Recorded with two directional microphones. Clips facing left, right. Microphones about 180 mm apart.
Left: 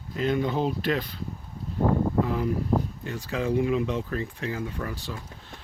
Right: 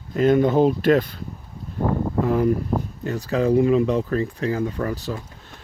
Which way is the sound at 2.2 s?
50° right (ahead or behind).